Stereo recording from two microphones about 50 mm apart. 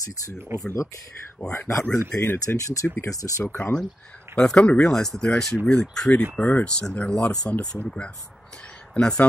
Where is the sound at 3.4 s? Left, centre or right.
Left.